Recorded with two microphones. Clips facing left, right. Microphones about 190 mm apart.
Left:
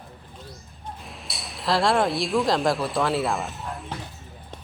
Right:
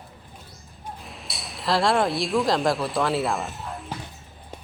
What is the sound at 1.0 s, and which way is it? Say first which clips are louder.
Speech: even; centre (ahead or behind).